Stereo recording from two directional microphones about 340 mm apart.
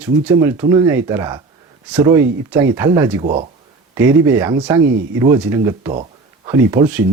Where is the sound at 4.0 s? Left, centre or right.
Centre.